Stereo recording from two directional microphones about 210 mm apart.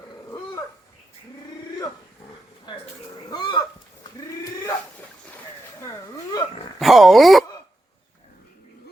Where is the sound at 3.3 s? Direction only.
20° left (ahead or behind).